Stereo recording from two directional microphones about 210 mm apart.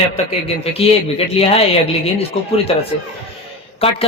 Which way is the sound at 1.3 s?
30° left (ahead or behind).